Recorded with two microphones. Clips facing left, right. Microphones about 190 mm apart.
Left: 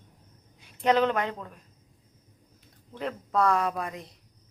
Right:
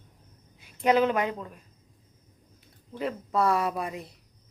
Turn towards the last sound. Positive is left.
turn(degrees=-5)  # may be behind; listen again after turning